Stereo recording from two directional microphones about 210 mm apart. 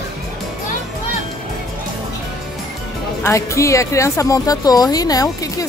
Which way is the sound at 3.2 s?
15° left (ahead or behind).